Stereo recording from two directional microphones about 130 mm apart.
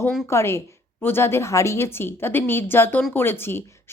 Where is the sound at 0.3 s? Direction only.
20° left (ahead or behind).